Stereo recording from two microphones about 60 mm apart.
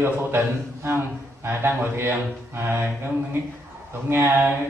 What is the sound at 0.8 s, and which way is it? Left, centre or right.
Speech, right.